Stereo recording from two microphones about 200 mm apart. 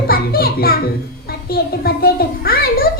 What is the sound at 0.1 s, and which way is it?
Music, 50° left (ahead or behind).